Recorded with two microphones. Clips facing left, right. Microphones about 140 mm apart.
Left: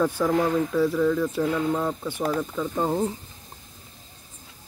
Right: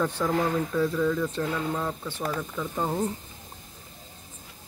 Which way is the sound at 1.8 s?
15° left (ahead or behind).